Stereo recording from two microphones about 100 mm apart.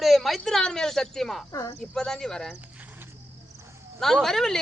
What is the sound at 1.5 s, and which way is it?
Speech, 35° left (ahead or behind).